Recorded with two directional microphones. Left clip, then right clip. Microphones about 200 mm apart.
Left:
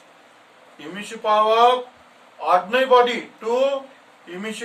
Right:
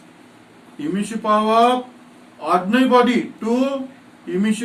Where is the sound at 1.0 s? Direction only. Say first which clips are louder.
Left 1 dB; 15° left (ahead or behind).